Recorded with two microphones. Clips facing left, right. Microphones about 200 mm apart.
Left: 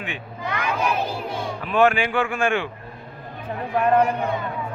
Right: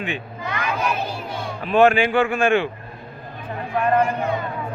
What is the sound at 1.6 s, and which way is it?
A man's voice, 25° right (ahead or behind).